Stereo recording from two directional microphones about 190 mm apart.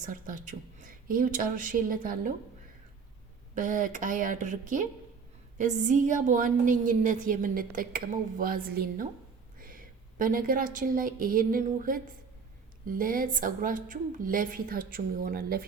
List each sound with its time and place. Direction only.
0.0 s a woman's voice: 45° right (ahead or behind)
3.5 s a woman's voice: 45° right (ahead or behind)